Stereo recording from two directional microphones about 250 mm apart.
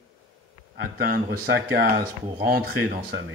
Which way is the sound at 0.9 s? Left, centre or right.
Right.